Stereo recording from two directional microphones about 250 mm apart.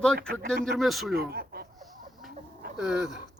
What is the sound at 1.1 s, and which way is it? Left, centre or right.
Speech, right.